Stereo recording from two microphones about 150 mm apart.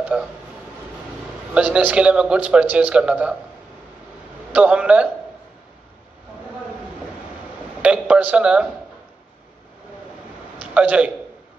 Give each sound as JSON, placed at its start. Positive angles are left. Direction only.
{"t": 0.0, "sound": "speech", "side_deg": -5}
{"t": 1.5, "sound": "a man's voice", "side_deg": -10}
{"t": 4.5, "sound": "a man's voice", "side_deg": -10}
{"t": 7.8, "sound": "a man's voice", "side_deg": -10}
{"t": 10.6, "sound": "a man's voice", "side_deg": -10}